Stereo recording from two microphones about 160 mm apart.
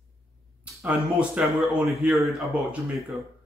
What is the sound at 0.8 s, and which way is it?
Speech, 5° right (ahead or behind).